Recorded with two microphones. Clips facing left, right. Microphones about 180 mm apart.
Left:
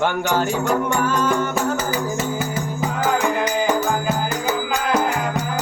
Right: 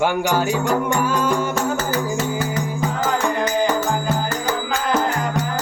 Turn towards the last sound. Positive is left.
turn(degrees=15)  # may be behind; listen again after turning